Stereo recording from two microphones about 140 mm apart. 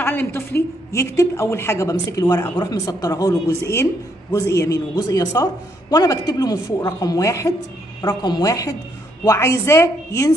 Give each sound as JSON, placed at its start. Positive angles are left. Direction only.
{"t": 0.0, "sound": "a woman's voice", "side_deg": 15}